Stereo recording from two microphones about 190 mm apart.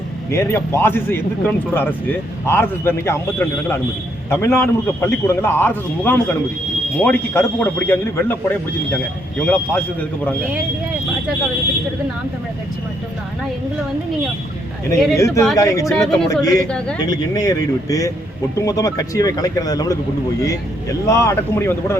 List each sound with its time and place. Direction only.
0.3 s a man's voice: 15° left (ahead or behind)
15.1 s a man's voice: 15° left (ahead or behind)
15.9 s speech: centre (ahead or behind)
16.3 s speech: 20° left (ahead or behind)
21.1 s a man's voice: 15° left (ahead or behind)